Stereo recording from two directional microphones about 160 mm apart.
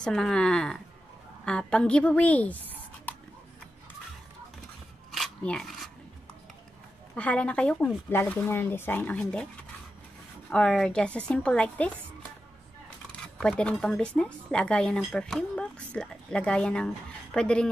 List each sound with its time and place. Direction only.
0.0 s a woman's voice: 5° left (ahead or behind)
5.1 s a sound: 5° left (ahead or behind)
7.2 s a woman's voice: 10° left (ahead or behind)
10.5 s a woman's voice: 5° left (ahead or behind)
13.4 s speech: 5° left (ahead or behind)